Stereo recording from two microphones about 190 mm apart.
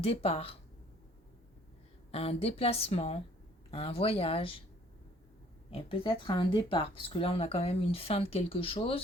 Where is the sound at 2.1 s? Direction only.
30° left (ahead or behind).